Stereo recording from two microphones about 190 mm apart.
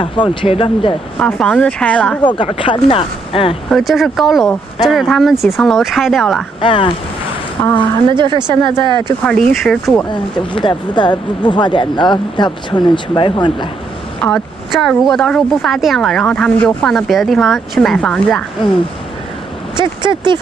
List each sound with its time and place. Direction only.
0.0 s speech: 25° left (ahead or behind)
1.2 s speech: 5° left (ahead or behind)
2.2 s speech: 25° left (ahead or behind)
3.7 s speech: centre (ahead or behind)
6.6 s speech: 25° left (ahead or behind)
7.6 s a woman's voice: 10° left (ahead or behind)
8.1 s speech: 25° right (ahead or behind)
9.2 s speech: centre (ahead or behind)
10.0 s speech: 25° left (ahead or behind)
14.2 s speech: 5° left (ahead or behind)
19.8 s speech: 25° right (ahead or behind)